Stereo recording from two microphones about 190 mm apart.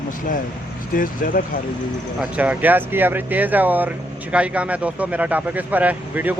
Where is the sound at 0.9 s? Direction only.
45° left (ahead or behind).